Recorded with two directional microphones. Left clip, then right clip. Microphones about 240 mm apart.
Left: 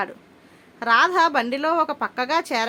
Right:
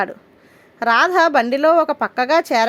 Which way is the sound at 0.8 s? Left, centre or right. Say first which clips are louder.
Right 3 dB; right.